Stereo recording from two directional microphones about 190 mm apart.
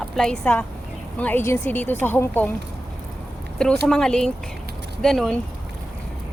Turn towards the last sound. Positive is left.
turn(degrees=0)  # may be behind; listen again after turning